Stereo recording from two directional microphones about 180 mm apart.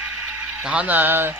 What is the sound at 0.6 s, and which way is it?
Speech, 5° right (ahead or behind).